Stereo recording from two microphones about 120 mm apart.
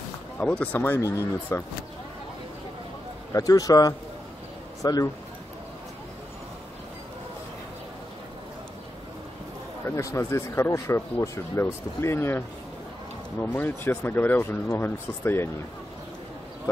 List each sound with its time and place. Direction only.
0.4 s speech: 10° left (ahead or behind)
3.3 s speech: 30° left (ahead or behind)
9.8 s speech: 25° left (ahead or behind)
16.7 s speech: 25° left (ahead or behind)